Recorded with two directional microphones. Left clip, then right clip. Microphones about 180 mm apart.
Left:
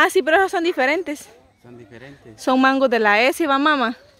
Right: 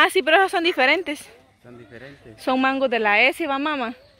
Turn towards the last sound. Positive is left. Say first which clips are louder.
# left 7 dB
turn(degrees=45)  # may be behind; listen again after turning